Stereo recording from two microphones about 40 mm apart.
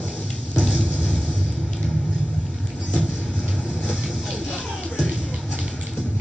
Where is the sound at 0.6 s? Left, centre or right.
Left.